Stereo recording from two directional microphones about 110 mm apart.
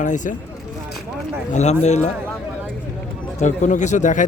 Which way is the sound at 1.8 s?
90° left.